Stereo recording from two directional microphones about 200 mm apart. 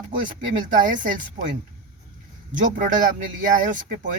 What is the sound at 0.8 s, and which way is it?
Speech, 40° right (ahead or behind).